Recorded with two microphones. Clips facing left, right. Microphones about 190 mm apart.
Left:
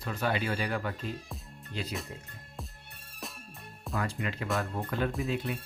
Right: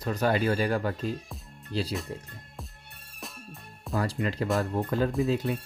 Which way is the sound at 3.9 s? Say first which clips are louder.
Right 5 dB; 35° right (ahead or behind).